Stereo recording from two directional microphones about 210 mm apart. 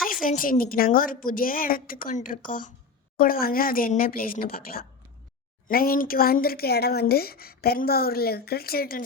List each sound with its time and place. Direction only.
0.0 s a woman's voice: 40° left (ahead or behind)